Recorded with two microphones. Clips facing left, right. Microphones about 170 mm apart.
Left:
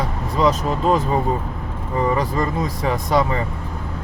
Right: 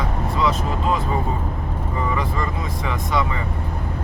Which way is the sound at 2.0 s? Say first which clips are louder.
Left 5 dB; 40° left (ahead or behind).